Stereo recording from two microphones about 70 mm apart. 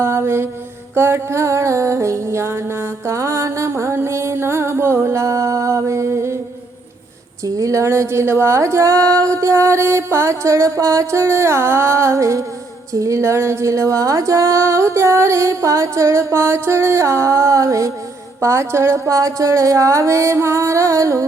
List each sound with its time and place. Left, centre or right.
0.0 s mantra: right
0.9 s music: right
7.4 s music: right